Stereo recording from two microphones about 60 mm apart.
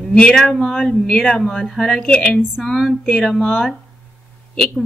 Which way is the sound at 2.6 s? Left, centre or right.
Centre.